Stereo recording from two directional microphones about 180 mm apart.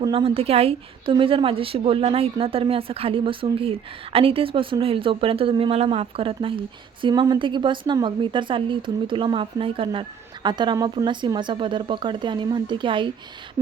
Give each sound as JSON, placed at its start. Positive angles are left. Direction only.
{"t": 0.0, "sound": "a woman's voice", "side_deg": -25}